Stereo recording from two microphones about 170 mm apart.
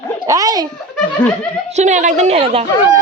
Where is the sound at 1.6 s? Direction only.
45° right (ahead or behind).